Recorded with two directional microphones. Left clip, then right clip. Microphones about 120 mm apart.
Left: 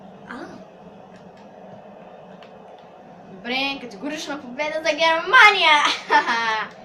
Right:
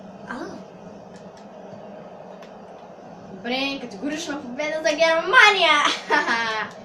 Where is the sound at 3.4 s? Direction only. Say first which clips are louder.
Left 1 dB; centre (ahead or behind).